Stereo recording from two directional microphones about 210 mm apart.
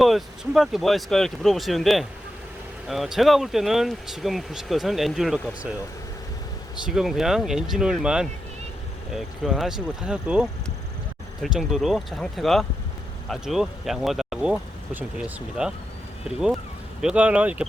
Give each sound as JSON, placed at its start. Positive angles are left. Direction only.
{"t": 0.0, "sound": "speech", "side_deg": 0}
{"t": 6.8, "sound": "speech", "side_deg": 0}
{"t": 11.4, "sound": "speech", "side_deg": 0}
{"t": 17.0, "sound": "speech", "side_deg": -5}